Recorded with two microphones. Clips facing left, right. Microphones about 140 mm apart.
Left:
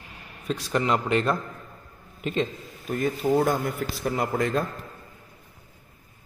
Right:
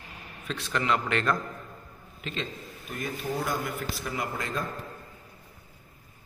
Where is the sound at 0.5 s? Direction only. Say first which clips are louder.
Left 4 dB; 35° left (ahead or behind).